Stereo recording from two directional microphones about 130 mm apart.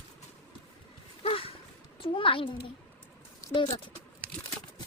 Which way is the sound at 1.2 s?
45° left (ahead or behind).